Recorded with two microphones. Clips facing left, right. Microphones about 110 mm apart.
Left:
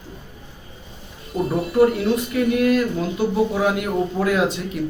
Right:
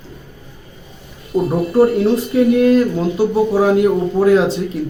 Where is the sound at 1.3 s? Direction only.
30° right (ahead or behind).